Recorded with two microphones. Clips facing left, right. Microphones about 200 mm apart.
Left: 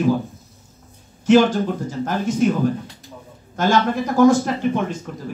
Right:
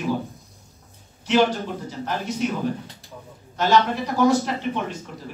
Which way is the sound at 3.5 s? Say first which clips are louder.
Left 2 dB; 50° left (ahead or behind).